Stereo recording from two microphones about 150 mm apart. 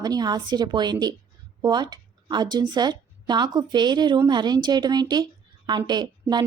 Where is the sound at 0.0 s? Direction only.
25° right (ahead or behind).